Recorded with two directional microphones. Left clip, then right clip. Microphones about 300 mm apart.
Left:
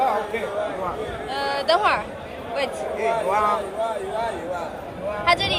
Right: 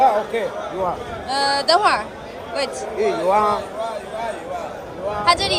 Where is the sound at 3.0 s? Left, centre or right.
Right.